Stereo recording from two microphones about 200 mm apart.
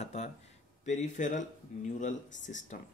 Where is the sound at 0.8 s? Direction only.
35° left (ahead or behind).